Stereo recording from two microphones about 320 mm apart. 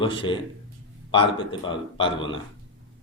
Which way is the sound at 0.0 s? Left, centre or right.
Centre.